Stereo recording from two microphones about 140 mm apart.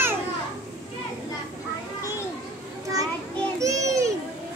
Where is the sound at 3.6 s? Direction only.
20° right (ahead or behind).